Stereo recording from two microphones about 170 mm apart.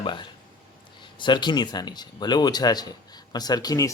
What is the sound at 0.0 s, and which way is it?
Speech, 30° left (ahead or behind).